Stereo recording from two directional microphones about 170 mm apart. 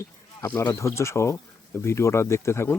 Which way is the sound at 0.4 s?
15° left (ahead or behind).